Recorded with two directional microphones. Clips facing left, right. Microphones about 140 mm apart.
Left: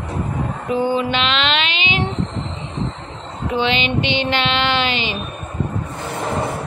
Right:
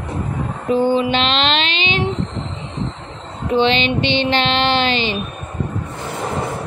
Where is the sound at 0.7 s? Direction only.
30° right (ahead or behind).